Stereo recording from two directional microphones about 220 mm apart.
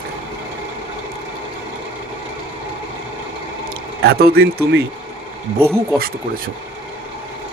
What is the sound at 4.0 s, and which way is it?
Speech, 45° right (ahead or behind).